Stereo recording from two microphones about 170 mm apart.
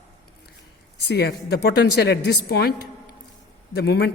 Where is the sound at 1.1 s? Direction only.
75° left (ahead or behind).